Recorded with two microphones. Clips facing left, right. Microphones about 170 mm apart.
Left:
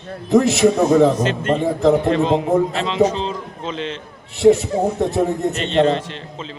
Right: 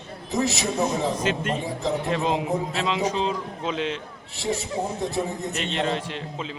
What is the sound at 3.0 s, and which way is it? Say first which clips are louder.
Speech: left 5 dB; 10° right (ahead or behind).